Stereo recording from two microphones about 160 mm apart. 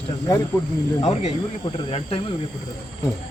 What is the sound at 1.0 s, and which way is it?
Speech, 40° left (ahead or behind).